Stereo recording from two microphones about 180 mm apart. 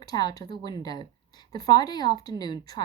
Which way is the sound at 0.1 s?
20° left (ahead or behind).